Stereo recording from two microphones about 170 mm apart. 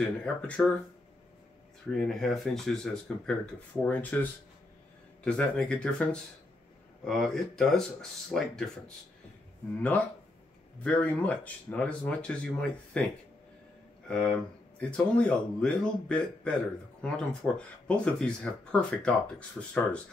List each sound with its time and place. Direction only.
0.0 s speech: 5° left (ahead or behind)
1.9 s speech: 5° left (ahead or behind)
7.1 s speech: centre (ahead or behind)
14.0 s speech: 5° left (ahead or behind)